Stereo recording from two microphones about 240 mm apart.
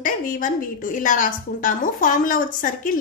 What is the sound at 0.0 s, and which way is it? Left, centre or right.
A woman's voice, left.